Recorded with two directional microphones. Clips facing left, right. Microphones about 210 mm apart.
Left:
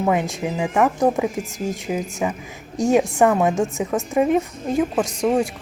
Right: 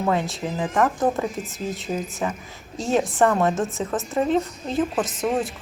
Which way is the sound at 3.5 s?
Centre (ahead or behind).